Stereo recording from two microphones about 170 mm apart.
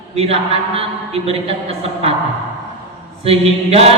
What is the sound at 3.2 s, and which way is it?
Speech, 35° right (ahead or behind).